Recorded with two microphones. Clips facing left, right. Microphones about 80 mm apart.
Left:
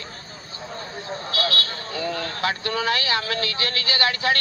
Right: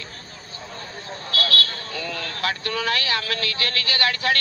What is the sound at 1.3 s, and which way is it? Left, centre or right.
Vehicle, left.